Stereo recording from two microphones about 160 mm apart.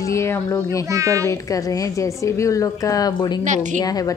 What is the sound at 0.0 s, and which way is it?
Speech, 20° left (ahead or behind).